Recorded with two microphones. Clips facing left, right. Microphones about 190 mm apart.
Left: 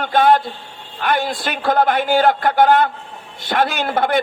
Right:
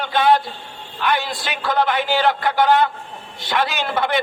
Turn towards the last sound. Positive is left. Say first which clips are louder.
# left 3 dB
turn(degrees=50)  # may be behind; listen again after turning